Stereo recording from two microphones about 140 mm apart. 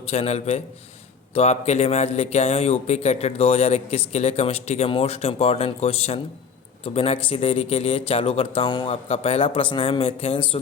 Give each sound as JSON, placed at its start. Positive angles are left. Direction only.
{"t": 0.0, "sound": "speech", "side_deg": 50}